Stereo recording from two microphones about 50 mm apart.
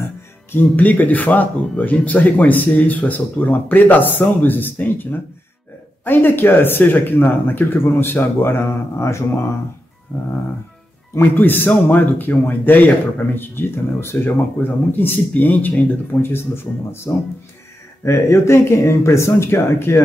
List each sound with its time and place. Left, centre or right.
0.5 s speech: left
11.1 s speech: left
14.6 s speech: left
16.2 s speech: left